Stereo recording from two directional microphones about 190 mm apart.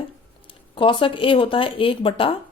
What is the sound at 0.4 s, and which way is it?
A woman's voice, 25° left (ahead or behind).